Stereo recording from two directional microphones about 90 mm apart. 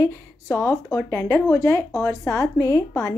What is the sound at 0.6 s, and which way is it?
A woman's voice, 30° left (ahead or behind).